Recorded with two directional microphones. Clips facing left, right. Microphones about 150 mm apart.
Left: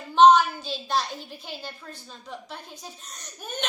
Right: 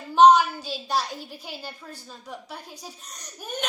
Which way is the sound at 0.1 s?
10° right (ahead or behind).